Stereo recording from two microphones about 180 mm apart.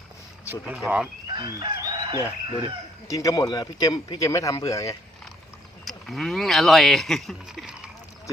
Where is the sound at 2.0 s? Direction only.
25° right (ahead or behind).